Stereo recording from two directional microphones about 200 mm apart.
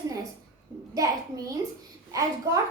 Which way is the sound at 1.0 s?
15° right (ahead or behind).